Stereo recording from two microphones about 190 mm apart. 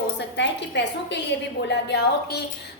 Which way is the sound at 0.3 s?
65° left (ahead or behind).